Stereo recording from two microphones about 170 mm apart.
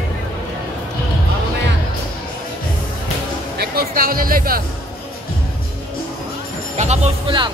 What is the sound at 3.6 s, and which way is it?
Speech, 60° right (ahead or behind).